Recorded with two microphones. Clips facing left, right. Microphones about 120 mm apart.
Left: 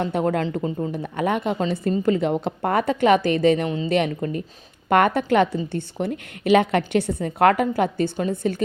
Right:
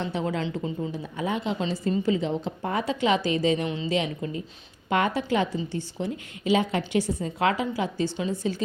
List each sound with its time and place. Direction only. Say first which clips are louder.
0.0 s speech: left 6 dB; 55° left (ahead or behind)
0.9 s a woman's voice: left 6 dB; 60° left (ahead or behind)